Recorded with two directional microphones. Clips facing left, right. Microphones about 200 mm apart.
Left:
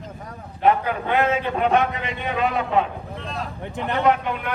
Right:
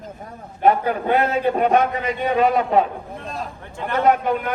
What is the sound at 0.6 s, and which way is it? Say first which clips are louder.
A man's voice: right 2 dB; 40° right (ahead or behind).